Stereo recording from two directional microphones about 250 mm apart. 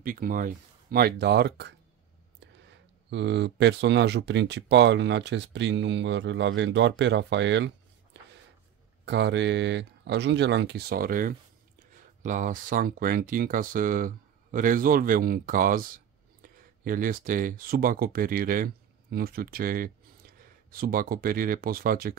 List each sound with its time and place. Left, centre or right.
0.0 s speech: right
3.1 s speech: right